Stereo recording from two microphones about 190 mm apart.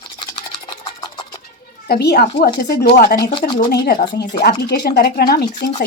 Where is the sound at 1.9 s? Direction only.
60° left (ahead or behind).